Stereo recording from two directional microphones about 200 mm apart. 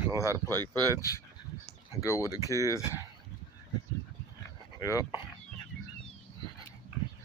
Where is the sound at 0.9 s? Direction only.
15° left (ahead or behind).